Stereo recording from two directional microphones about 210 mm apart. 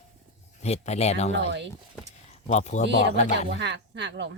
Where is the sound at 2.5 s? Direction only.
35° left (ahead or behind).